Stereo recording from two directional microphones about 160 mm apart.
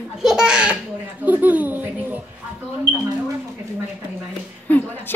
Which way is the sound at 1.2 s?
10° right (ahead or behind).